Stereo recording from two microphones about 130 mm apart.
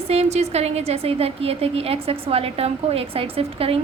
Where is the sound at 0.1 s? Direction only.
55° right (ahead or behind).